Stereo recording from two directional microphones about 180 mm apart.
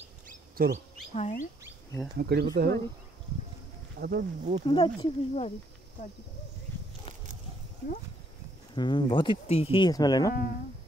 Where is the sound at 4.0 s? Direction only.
60° right (ahead or behind).